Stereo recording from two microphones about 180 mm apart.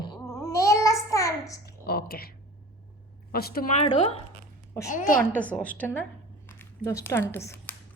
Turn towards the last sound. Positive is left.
turn(degrees=15)  # may be behind; listen again after turning